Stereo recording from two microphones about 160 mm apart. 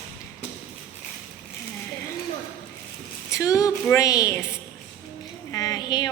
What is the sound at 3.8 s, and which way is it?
Speech, 20° left (ahead or behind).